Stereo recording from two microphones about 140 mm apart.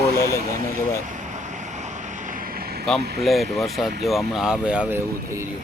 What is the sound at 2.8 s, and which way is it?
Speech, centre (ahead or behind).